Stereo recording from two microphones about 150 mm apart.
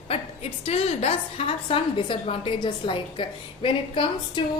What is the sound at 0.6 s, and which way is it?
A woman's voice, 45° left (ahead or behind).